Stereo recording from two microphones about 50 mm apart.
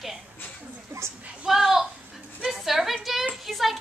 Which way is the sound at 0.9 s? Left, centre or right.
Right.